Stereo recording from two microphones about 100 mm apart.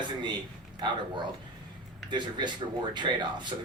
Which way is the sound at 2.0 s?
50° right (ahead or behind).